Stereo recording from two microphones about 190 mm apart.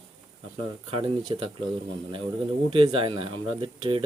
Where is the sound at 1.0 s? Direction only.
25° right (ahead or behind).